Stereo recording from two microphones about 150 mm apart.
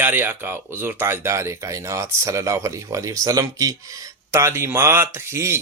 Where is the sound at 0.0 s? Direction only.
10° right (ahead or behind).